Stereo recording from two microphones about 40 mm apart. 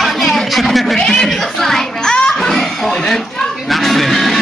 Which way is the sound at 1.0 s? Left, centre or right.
Centre.